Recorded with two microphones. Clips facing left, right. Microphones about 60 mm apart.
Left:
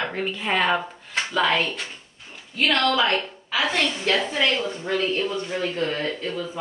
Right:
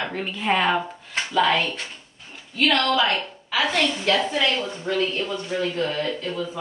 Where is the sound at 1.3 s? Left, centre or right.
Centre.